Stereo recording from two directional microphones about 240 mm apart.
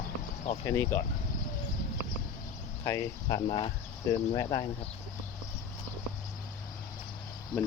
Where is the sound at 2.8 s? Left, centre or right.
Centre.